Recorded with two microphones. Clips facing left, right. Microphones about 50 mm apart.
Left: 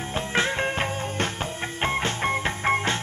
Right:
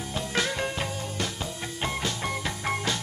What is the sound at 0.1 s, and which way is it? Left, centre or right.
Music, left.